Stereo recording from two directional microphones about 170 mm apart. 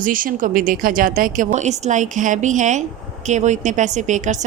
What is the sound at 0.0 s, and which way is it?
A woman's voice, 55° right (ahead or behind).